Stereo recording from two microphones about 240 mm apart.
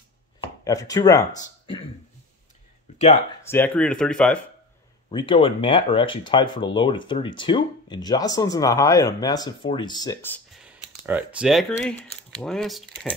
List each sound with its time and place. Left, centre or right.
0.4 s chopping: centre
3.4 s speech: centre
5.1 s speech: left
10.6 s speech: centre